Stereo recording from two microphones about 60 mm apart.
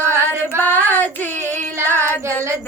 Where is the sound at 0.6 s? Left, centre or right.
Left.